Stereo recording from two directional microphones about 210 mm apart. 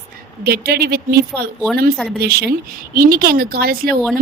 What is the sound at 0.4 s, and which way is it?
Speech, 50° right (ahead or behind).